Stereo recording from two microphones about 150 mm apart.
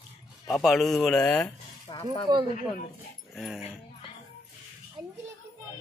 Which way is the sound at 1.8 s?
30° left (ahead or behind).